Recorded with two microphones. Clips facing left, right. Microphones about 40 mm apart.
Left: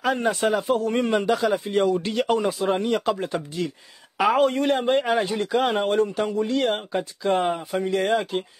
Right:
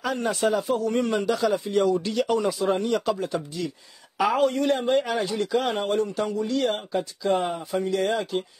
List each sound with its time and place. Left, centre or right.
0.0 s a man's voice: left
3.1 s a man's voice: left